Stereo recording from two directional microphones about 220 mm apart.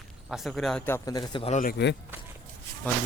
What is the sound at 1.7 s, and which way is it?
Speech, 50° left (ahead or behind).